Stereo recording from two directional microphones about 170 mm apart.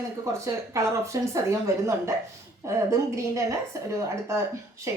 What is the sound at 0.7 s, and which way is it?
A woman's voice, 15° right (ahead or behind).